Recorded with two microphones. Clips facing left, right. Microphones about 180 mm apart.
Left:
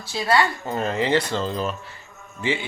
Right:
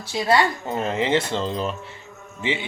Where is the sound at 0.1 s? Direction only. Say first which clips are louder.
Right 1 dB; 20° right (ahead or behind).